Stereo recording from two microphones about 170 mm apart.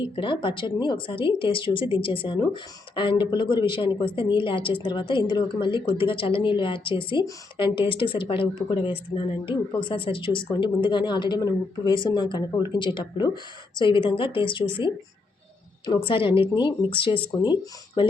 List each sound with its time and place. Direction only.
0.0 s a woman's voice: 30° left (ahead or behind)